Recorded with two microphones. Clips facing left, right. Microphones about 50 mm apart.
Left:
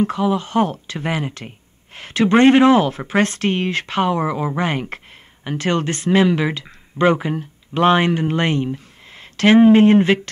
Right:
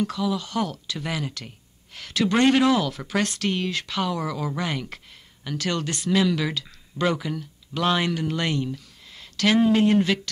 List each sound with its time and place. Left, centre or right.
0.0 s speech: left